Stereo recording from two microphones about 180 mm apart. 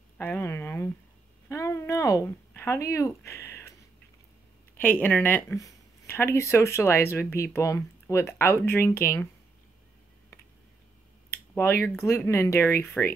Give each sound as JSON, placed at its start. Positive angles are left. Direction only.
{"t": 0.2, "sound": "a sound", "side_deg": 15}
{"t": 4.7, "sound": "speech", "side_deg": 10}
{"t": 11.5, "sound": "speech", "side_deg": 15}